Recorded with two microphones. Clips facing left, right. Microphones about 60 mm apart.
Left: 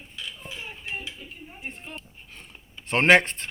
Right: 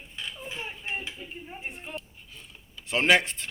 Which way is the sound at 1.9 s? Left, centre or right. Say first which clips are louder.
Right 2 dB; left.